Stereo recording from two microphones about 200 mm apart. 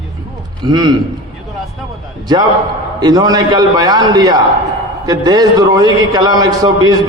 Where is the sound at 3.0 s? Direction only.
20° right (ahead or behind).